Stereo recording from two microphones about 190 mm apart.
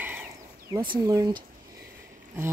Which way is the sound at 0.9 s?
20° right (ahead or behind).